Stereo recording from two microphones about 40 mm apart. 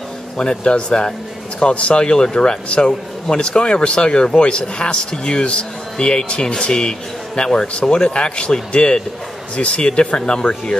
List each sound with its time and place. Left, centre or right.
0.4 s speech: left